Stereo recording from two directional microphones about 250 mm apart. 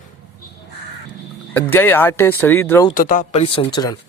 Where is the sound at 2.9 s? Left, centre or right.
Left.